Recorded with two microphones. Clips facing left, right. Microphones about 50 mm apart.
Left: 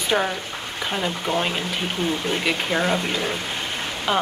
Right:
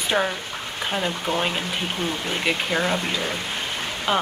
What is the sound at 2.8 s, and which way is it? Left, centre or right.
Speech, centre.